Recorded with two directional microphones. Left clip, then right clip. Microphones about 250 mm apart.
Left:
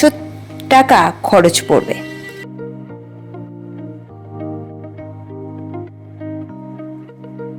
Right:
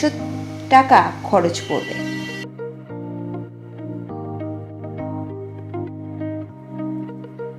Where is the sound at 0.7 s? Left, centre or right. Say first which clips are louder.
Left 3 dB; left.